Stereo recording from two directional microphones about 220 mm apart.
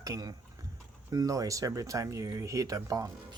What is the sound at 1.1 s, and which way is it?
Speech, 15° right (ahead or behind).